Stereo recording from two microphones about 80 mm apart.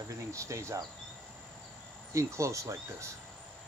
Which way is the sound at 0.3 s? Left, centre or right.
Right.